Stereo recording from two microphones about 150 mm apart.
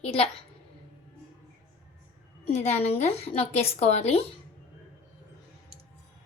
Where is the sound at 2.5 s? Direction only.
45° left (ahead or behind).